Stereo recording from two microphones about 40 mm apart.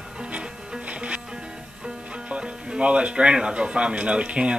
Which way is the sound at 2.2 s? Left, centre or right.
Right.